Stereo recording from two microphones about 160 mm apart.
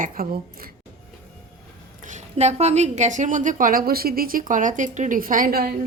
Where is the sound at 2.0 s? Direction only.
50° right (ahead or behind); by 5.7 s 70° right (ahead or behind).